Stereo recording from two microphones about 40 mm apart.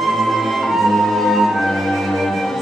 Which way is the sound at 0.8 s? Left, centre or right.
Centre.